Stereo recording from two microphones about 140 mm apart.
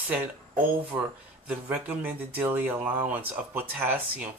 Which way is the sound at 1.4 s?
10° right (ahead or behind).